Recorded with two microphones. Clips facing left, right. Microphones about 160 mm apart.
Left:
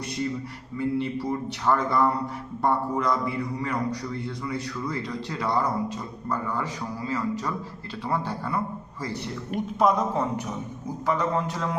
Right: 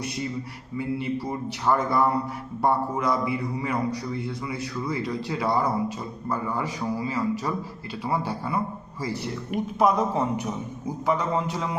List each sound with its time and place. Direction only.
0.8 s a man's voice: 5° right (ahead or behind)